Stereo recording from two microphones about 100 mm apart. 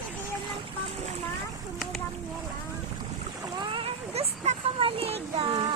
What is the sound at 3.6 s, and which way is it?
Splash, 60° right (ahead or behind).